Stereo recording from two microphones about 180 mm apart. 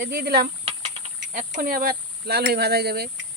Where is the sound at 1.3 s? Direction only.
50° right (ahead or behind).